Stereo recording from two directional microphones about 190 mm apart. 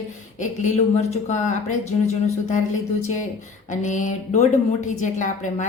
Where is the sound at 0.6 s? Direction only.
35° left (ahead or behind).